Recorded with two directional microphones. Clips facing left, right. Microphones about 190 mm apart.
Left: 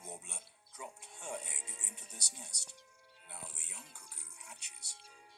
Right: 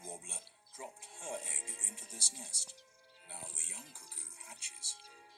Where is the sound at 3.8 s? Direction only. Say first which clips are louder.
Right 1 dB; 30° right (ahead or behind).